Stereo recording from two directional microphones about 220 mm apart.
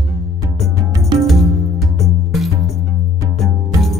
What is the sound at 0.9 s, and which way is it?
Music, 20° right (ahead or behind).